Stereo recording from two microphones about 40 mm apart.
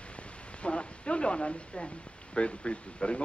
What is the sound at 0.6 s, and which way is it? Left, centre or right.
Speech, left.